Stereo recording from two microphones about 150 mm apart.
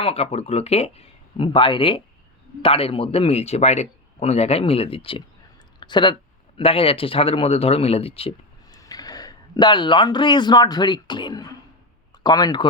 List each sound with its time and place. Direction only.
0.0 s a man's voice: 40° left (ahead or behind)
8.7 s speech: 25° left (ahead or behind)